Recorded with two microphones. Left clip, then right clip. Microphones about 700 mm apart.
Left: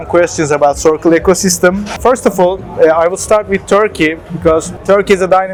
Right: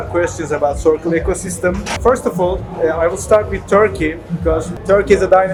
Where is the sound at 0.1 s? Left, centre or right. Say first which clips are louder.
Left 8 dB; left.